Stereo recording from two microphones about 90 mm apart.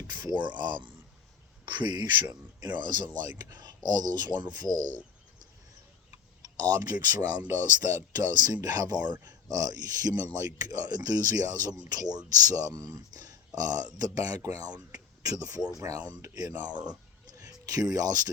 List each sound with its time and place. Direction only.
0.1 s speech: 55° right (ahead or behind)
6.4 s speech: 45° right (ahead or behind)
16.9 s a sound: 45° right (ahead or behind)